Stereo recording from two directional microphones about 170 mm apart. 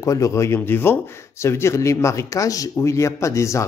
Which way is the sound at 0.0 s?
20° left (ahead or behind).